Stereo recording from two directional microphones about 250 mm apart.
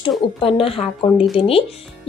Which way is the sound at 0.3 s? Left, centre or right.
Left.